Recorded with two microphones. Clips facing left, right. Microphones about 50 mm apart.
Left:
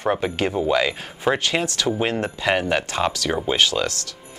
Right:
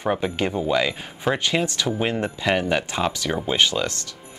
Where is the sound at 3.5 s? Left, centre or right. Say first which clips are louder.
Right 1 dB; centre.